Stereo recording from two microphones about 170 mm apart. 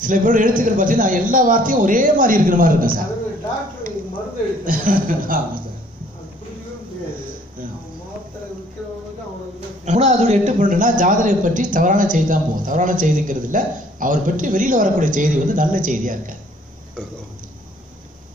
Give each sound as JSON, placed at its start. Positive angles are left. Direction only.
{"t": 0.0, "sound": "a man's voice", "side_deg": -50}
{"t": 4.6, "sound": "speech", "side_deg": -55}
{"t": 9.8, "sound": "a man's voice", "side_deg": -45}